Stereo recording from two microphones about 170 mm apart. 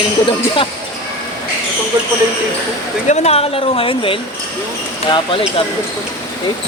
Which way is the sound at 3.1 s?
40° left (ahead or behind).